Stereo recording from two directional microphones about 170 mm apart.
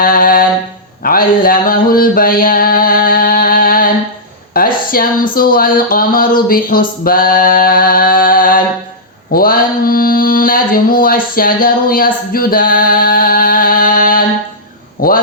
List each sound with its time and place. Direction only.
0.0 s speech: 55° left (ahead or behind)
1.0 s mantra: 60° left (ahead or behind)
4.5 s speech: 60° left (ahead or behind)
9.3 s mantra: 60° left (ahead or behind)
15.0 s a sound: 55° left (ahead or behind)